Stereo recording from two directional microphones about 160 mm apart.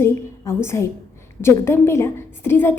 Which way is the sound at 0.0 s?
15° left (ahead or behind).